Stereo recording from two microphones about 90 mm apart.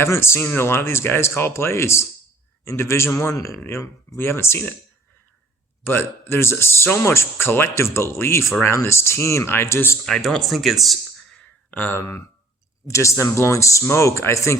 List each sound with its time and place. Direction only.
0.0 s speech: 30° left (ahead or behind)
5.8 s speech: 25° left (ahead or behind)
10.1 s speech: 5° left (ahead or behind)
11.7 s speech: 20° left (ahead or behind)
11.9 s speech: 30° left (ahead or behind)